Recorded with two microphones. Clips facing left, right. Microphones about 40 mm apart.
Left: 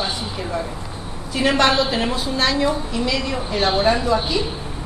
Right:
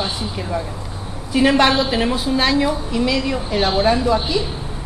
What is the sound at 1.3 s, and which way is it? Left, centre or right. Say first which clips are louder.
Speech: right 3 dB; centre.